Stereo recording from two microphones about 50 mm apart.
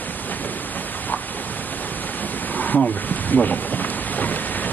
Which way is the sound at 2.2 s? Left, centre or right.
Left.